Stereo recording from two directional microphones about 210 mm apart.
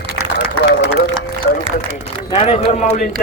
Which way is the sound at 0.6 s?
50° left (ahead or behind).